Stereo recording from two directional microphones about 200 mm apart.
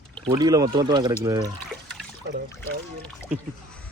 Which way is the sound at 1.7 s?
Centre (ahead or behind).